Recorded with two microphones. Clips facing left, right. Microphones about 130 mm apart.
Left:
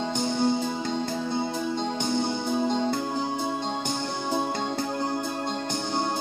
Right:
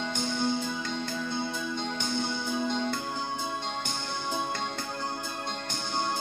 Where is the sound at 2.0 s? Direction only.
35° left (ahead or behind).